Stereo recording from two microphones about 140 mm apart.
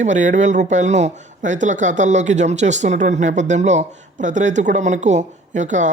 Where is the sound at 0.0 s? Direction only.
60° right (ahead or behind).